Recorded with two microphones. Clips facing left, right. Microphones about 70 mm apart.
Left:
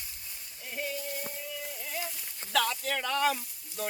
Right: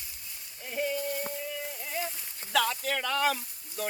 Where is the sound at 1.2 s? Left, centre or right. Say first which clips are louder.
Right 4 dB; right.